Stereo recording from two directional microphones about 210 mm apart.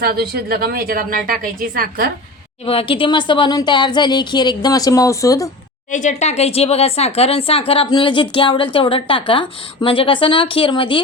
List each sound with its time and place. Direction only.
0.0 s speech: 45° right (ahead or behind)
2.6 s a woman's voice: 25° left (ahead or behind)
5.9 s a woman's voice: 35° left (ahead or behind)